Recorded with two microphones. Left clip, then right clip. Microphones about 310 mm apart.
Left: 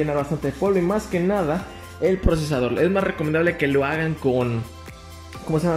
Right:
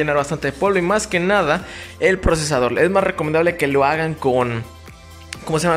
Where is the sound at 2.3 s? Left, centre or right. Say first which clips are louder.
Right 5 dB; right.